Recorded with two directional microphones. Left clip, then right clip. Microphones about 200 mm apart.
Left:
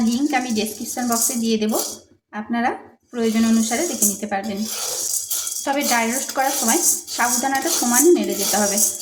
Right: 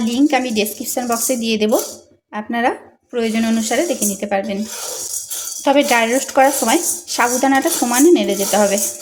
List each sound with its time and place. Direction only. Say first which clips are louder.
0.3 s speech: right 5 dB; 45° right (ahead or behind)
5.6 s speech: right 7 dB; 45° right (ahead or behind)